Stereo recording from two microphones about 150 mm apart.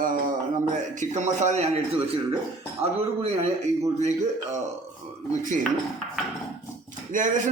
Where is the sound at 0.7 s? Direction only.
50° right (ahead or behind).